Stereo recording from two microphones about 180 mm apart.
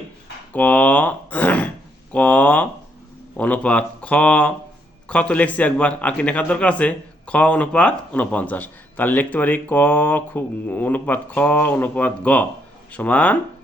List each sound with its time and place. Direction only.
0.5 s speech: 10° left (ahead or behind)
2.1 s a sound: 10° left (ahead or behind)
3.3 s a man's voice: 10° left (ahead or behind)